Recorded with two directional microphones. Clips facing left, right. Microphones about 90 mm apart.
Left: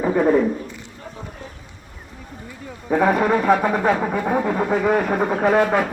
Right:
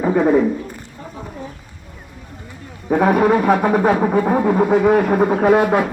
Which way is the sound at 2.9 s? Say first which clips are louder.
Right 3 dB; 10° right (ahead or behind).